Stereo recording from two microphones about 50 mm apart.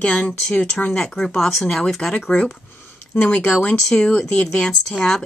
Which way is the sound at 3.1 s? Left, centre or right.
Left.